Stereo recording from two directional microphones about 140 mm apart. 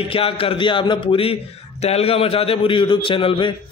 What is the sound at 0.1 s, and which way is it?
A man's voice, 40° left (ahead or behind).